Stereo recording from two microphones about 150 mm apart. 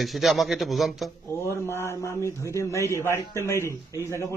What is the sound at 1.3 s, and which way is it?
A man's voice, 15° left (ahead or behind).